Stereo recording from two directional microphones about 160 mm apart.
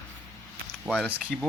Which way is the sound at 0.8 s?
10° left (ahead or behind).